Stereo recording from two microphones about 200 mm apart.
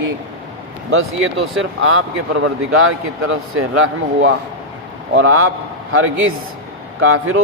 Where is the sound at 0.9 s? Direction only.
80° right.